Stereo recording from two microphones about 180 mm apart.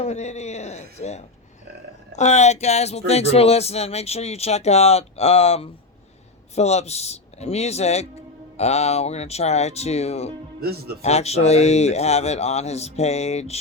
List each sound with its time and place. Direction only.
0.0 s speech: 40° left (ahead or behind)
10.6 s speech: 60° right (ahead or behind)
11.0 s speech: 35° left (ahead or behind)